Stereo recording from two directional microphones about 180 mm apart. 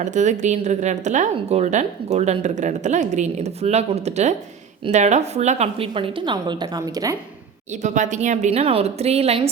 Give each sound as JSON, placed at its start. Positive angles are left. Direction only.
{"t": 0.0, "sound": "a woman's voice", "side_deg": -40}
{"t": 7.7, "sound": "speech", "side_deg": -40}